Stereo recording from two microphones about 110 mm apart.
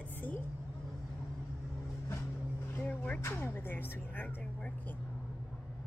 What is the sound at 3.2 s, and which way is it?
Speech, 25° left (ahead or behind).